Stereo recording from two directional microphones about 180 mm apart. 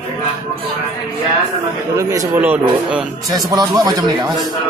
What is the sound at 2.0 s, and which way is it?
A man's voice, 15° right (ahead or behind).